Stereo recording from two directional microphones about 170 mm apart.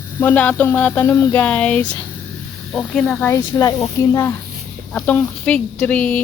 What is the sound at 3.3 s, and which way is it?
Speech, 20° left (ahead or behind).